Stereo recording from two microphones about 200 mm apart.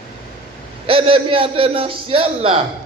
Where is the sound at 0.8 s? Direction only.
25° right (ahead or behind).